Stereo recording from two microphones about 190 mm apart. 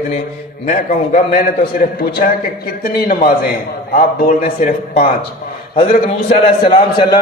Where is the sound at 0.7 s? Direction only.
40° left (ahead or behind).